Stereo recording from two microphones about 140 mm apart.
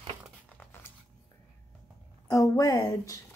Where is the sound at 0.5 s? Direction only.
10° left (ahead or behind).